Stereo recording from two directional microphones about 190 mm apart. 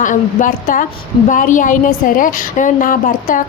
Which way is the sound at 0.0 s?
45° left (ahead or behind).